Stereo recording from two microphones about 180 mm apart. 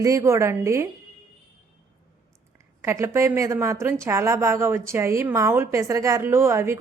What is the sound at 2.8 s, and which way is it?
A woman's voice, 15° right (ahead or behind).